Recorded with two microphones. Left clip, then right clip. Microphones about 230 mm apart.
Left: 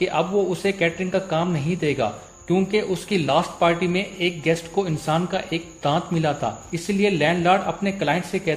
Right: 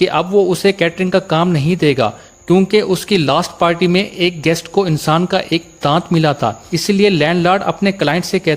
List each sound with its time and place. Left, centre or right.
0.0 s a man's voice: right